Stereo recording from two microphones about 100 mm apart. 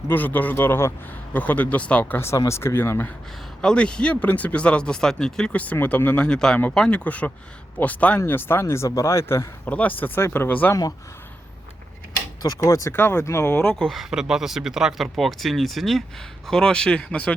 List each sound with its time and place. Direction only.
0.1 s speech: 15° left (ahead or behind)
3.6 s speech: 10° left (ahead or behind); by 9.5 s 25° left (ahead or behind)
9.6 s speech: 15° left (ahead or behind)
12.4 s speech: 35° left (ahead or behind)
12.9 s speech: 20° left (ahead or behind)
13.7 s speech: centre (ahead or behind)